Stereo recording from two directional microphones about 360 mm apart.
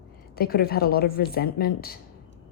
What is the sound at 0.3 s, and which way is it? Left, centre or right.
A woman's voice, left.